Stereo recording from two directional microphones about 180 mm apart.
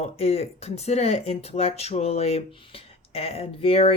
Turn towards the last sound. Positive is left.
turn(degrees=30)  # may be behind; listen again after turning